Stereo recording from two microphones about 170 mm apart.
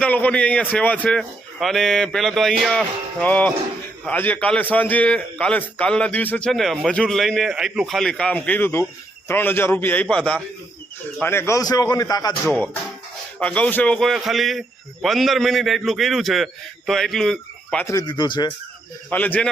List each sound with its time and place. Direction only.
0.0 s a man's voice: 10° left (ahead or behind)
12.5 s a man's voice: 5° left (ahead or behind)
17.8 s speech: 25° left (ahead or behind)
19.1 s a man's voice: 10° left (ahead or behind)